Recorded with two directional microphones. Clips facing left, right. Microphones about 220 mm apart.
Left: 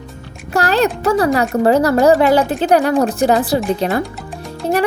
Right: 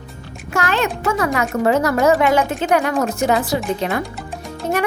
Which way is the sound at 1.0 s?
35° left (ahead or behind).